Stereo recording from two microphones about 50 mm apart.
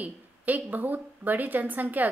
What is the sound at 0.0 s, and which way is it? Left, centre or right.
A woman's voice, right.